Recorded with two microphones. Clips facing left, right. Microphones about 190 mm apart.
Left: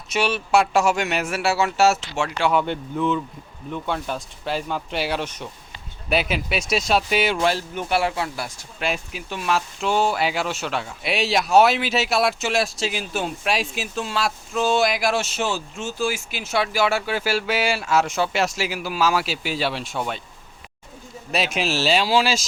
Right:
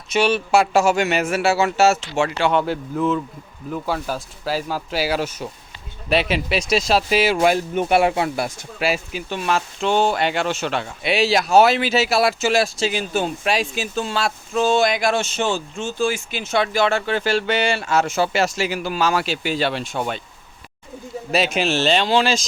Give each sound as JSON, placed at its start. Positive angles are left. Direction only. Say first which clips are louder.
{"t": 0.1, "sound": "speech", "louder": "right 3 dB", "side_deg": 0}
{"t": 7.4, "sound": "speech", "louder": "right 5 dB", "side_deg": -20}
{"t": 8.8, "sound": "speech", "louder": "right 4 dB", "side_deg": 0}
{"t": 21.3, "sound": "speech", "louder": "right 4 dB", "side_deg": 0}